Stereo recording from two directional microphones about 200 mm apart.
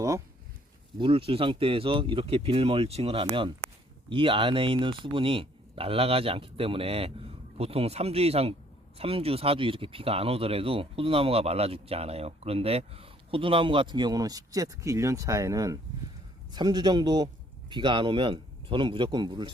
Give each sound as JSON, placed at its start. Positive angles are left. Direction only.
{"t": 0.9, "sound": "speech", "side_deg": -25}